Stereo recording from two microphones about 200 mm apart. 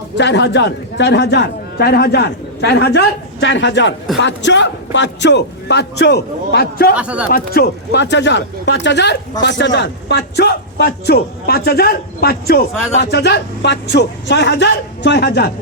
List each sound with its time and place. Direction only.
0.2 s a man's voice: 60° left (ahead or behind)
6.9 s speech: 5° right (ahead or behind)
7.3 s a man's voice: 50° left (ahead or behind)